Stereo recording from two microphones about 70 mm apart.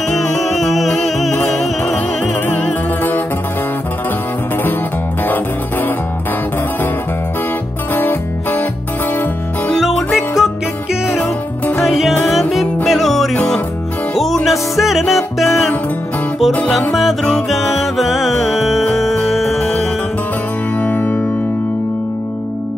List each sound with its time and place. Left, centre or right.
0.1 s music: centre
2.4 s music: left
5.2 s music: left
7.9 s music: left
9.8 s music: centre
11.1 s music: left
11.8 s music: centre
16.9 s music: centre
20.8 s music: left